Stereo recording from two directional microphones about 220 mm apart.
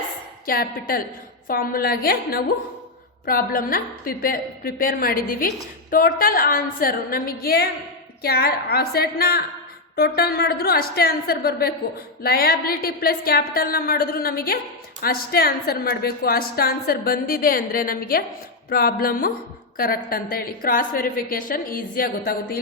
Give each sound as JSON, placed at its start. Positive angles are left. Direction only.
{"t": 0.4, "sound": "a woman's voice", "side_deg": 40}